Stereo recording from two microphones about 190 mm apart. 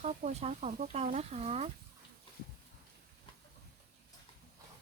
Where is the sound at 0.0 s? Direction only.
35° right (ahead or behind).